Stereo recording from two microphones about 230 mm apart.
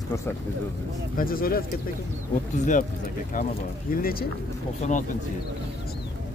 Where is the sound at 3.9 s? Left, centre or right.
Left.